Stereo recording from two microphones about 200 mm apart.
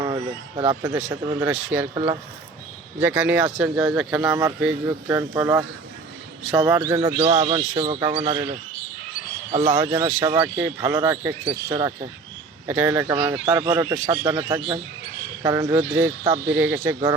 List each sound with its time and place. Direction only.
0.0 s a sound: 20° right (ahead or behind)
1.1 s speech: 10° right (ahead or behind)
3.0 s speech: 5° right (ahead or behind)
4.4 s speech: 15° right (ahead or behind)
9.6 s speech: 20° right (ahead or behind)
12.6 s speech: 10° right (ahead or behind)